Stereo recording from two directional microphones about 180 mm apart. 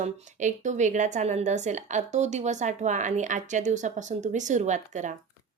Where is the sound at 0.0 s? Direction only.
40° right (ahead or behind).